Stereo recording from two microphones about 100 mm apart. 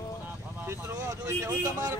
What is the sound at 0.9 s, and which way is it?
Speech, 35° right (ahead or behind).